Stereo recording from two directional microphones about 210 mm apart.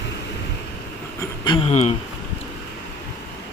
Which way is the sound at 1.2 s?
20° left (ahead or behind).